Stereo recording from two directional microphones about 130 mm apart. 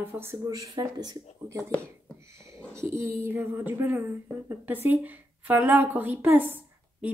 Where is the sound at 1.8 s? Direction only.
20° right (ahead or behind).